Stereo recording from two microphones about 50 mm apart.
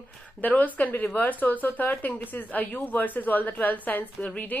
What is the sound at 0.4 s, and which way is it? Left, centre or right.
A woman's voice, left.